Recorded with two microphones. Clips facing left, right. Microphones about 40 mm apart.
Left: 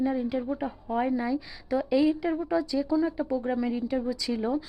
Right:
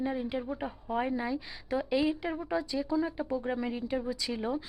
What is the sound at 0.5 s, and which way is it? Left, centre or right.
Speech, centre.